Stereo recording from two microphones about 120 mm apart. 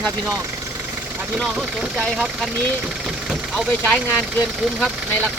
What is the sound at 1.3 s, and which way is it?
Speech, 5° right (ahead or behind).